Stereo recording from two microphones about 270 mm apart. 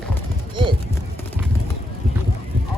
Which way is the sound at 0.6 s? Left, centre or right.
Centre.